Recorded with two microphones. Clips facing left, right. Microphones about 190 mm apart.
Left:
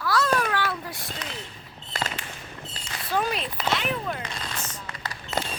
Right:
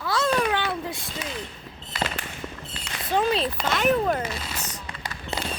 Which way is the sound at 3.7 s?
45° right (ahead or behind).